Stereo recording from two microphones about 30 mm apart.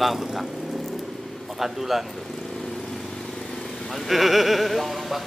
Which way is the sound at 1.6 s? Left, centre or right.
Centre.